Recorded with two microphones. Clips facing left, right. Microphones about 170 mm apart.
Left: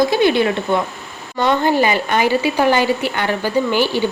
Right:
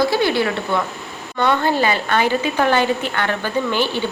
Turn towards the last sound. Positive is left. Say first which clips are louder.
# left 3 dB
turn(degrees=10)  # may be behind; listen again after turning